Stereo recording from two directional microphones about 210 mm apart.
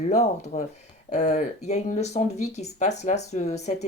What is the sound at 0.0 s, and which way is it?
Speech, 30° left (ahead or behind).